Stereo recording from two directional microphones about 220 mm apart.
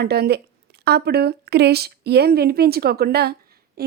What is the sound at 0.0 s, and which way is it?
A woman's voice, 45° right (ahead or behind).